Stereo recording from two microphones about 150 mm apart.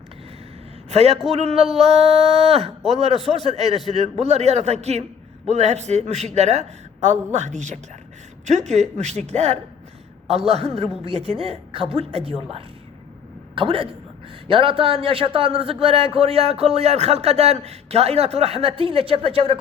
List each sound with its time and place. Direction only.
0.9 s a man's voice: 45° right (ahead or behind)